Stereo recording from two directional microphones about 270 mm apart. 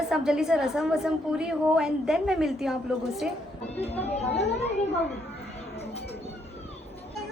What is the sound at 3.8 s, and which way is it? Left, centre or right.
Speech, centre.